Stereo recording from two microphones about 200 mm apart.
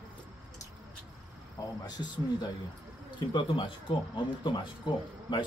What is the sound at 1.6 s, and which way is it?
Speech, 15° left (ahead or behind).